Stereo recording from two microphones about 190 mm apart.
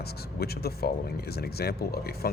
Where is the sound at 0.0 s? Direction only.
55° left (ahead or behind).